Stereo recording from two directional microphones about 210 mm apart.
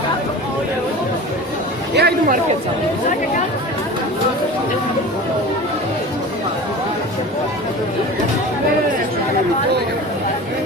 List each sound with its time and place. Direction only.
2.0 s speech: 45° right (ahead or behind)